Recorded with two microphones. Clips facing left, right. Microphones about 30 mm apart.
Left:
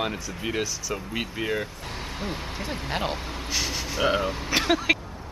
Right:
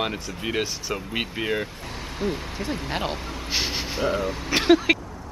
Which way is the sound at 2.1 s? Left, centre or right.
Centre.